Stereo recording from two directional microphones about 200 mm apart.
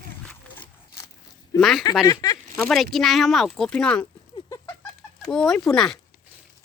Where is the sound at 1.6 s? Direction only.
Centre (ahead or behind).